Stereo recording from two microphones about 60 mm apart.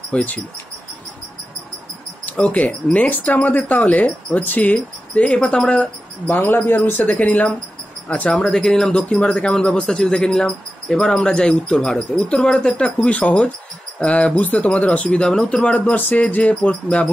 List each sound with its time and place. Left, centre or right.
0.1 s speech: left
2.2 s speech: left
6.2 s speech: left
8.3 s speech: centre